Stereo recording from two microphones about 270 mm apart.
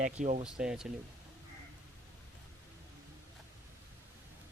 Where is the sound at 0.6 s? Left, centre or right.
Centre.